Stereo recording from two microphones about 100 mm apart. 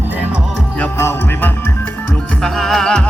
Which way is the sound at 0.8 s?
20° left (ahead or behind).